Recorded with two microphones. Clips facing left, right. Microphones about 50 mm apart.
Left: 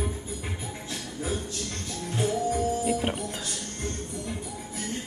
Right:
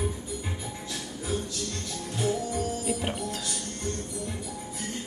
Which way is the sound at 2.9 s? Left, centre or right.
Centre.